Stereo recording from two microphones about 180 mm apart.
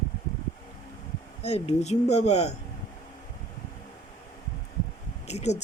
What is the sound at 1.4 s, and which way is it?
Speech, 35° left (ahead or behind).